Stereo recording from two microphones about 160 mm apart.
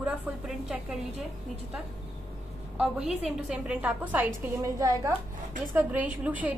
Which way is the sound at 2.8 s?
5° right (ahead or behind).